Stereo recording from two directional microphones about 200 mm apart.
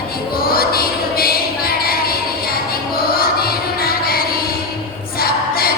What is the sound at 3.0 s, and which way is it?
Music, 50° left (ahead or behind).